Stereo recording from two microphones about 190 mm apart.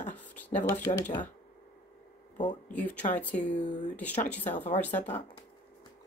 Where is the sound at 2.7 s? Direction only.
5° left (ahead or behind).